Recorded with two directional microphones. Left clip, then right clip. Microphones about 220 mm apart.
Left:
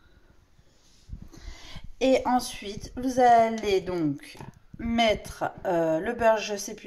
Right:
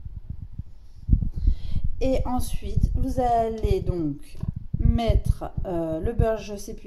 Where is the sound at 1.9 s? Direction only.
5° left (ahead or behind).